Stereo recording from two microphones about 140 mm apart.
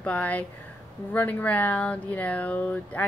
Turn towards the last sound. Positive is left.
turn(degrees=10)  # may be behind; listen again after turning